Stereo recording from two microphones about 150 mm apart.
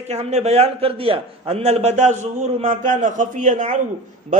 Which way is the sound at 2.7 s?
60° right (ahead or behind).